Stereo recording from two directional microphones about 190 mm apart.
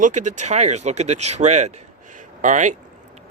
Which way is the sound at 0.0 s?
40° right (ahead or behind).